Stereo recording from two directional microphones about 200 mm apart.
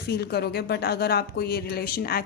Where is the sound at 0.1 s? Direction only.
50° left (ahead or behind).